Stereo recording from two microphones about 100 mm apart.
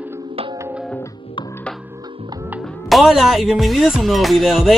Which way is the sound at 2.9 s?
Centre (ahead or behind).